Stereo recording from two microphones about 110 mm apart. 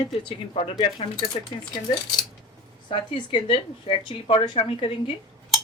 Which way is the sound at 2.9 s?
45° left (ahead or behind).